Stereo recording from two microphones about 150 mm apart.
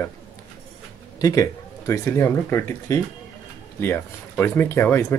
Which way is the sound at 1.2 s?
25° left (ahead or behind).